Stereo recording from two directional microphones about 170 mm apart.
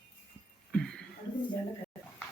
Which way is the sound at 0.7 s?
5° left (ahead or behind).